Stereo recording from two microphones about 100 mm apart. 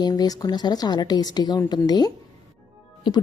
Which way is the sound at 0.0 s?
40° left (ahead or behind).